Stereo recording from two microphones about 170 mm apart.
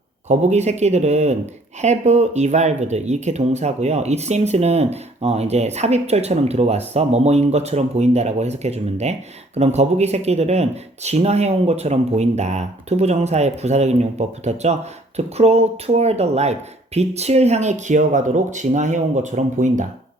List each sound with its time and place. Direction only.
0.3 s speech: 40° right (ahead or behind)